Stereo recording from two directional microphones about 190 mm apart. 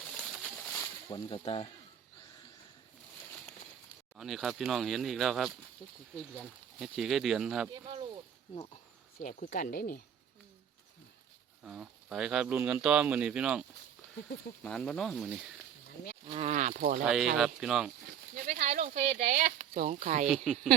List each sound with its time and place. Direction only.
0.1 s a sound: centre (ahead or behind)
0.7 s speech: 20° left (ahead or behind)
4.2 s speech: centre (ahead or behind)
6.7 s speech: centre (ahead or behind)
7.7 s speech: 25° right (ahead or behind)
8.5 s a sound: 30° left (ahead or behind)
9.3 s speech: 50° left (ahead or behind)
11.6 s speech: centre (ahead or behind)
14.6 s speech: 5° left (ahead or behind)
16.2 s speech: 35° right (ahead or behind)
17.1 s speech: 5° right (ahead or behind)
18.3 s speech: 40° right (ahead or behind)
20.2 s speech: 5° right (ahead or behind)